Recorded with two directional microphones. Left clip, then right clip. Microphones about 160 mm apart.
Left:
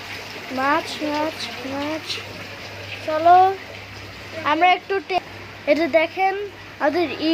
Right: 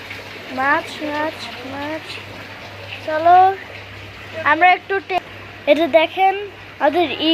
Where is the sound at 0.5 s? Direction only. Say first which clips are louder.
Right 3 dB; 10° left (ahead or behind).